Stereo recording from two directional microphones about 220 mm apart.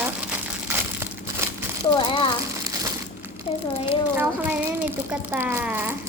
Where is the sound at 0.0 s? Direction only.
10° right (ahead or behind).